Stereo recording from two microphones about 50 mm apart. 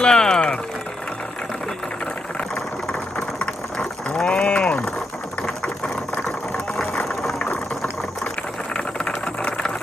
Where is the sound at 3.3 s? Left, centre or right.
Centre.